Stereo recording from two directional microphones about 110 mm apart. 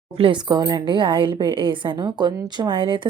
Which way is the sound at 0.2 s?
45° right (ahead or behind).